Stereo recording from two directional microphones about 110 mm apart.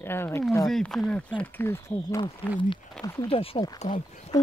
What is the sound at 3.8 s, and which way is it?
Speech, 90° left.